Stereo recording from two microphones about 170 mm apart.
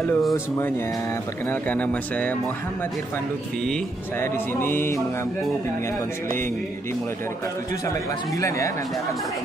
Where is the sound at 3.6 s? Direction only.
Centre (ahead or behind).